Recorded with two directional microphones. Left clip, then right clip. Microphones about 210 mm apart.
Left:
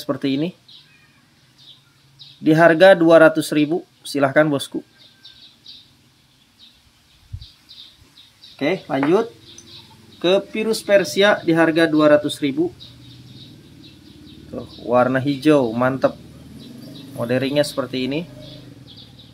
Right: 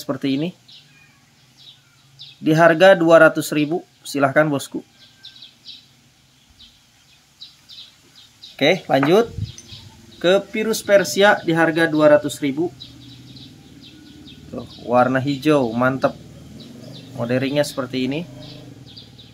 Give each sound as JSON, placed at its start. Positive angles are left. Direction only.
{"t": 0.0, "sound": "speech", "side_deg": 0}
{"t": 2.4, "sound": "speech", "side_deg": 0}
{"t": 8.5, "sound": "speech", "side_deg": -30}
{"t": 10.1, "sound": "speech", "side_deg": -15}
{"t": 14.5, "sound": "speech", "side_deg": 0}
{"t": 17.2, "sound": "speech", "side_deg": 0}